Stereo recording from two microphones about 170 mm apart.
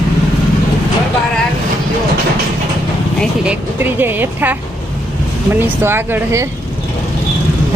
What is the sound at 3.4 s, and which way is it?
Speech, 10° right (ahead or behind).